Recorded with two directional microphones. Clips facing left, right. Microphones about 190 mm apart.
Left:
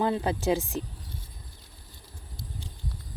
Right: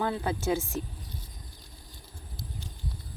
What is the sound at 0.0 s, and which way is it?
Speech, 20° left (ahead or behind).